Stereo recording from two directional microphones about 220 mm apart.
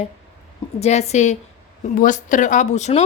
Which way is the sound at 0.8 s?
30° left (ahead or behind).